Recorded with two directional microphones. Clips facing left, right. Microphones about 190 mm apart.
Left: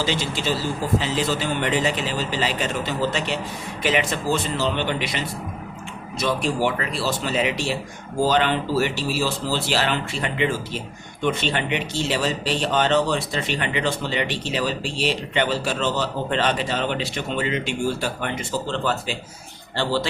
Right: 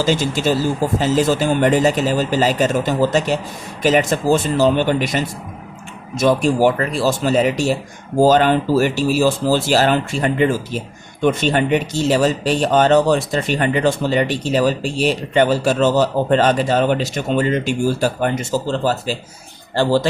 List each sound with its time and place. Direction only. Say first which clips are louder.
0.0 s speech: right 7 dB; 45° right (ahead or behind)